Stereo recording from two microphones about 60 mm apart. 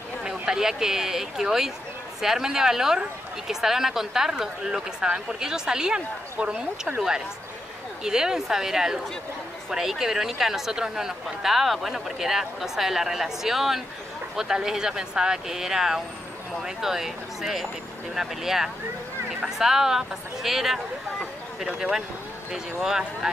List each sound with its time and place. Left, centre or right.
0.2 s speech: centre
21.6 s speech: centre